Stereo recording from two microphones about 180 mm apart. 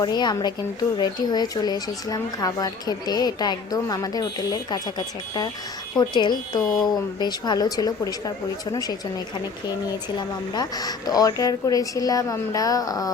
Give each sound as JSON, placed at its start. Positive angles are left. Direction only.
{"t": 0.0, "sound": "speech", "side_deg": 25}